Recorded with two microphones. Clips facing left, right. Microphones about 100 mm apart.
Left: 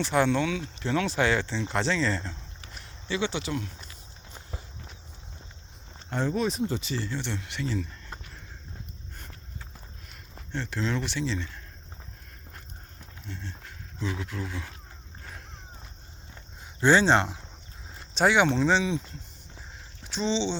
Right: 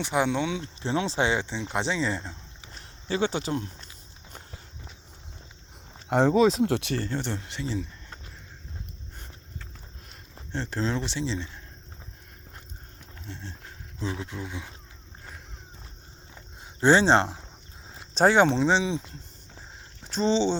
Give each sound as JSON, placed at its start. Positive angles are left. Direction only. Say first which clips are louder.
{"t": 0.0, "sound": "speech", "louder": "left 1 dB", "side_deg": -15}
{"t": 2.8, "sound": "speech", "louder": "right 3 dB", "side_deg": -40}
{"t": 6.1, "sound": "speech", "louder": "right 8 dB", "side_deg": -90}
{"t": 10.5, "sound": "speech", "louder": "right 1 dB", "side_deg": -35}
{"t": 13.2, "sound": "speech", "louder": "even", "side_deg": -30}
{"t": 16.8, "sound": "speech", "louder": "right 1 dB", "side_deg": -30}
{"t": 20.1, "sound": "speech", "louder": "right 4 dB", "side_deg": -40}